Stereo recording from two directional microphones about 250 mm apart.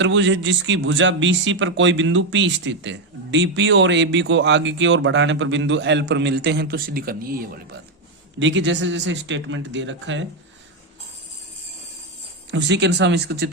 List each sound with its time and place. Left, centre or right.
0.0 s speech: right
8.4 s speech: right
12.5 s speech: right